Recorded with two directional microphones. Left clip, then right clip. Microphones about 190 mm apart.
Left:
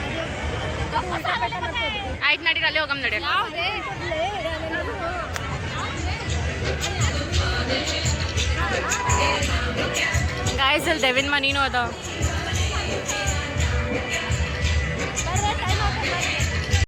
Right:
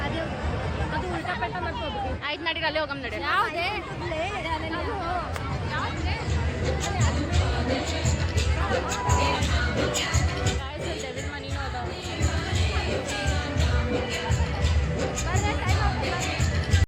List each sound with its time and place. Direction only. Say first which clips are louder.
2.2 s speech: left 9 dB; 15° right (ahead or behind)
3.2 s speech: right 3 dB; 60° right (ahead or behind)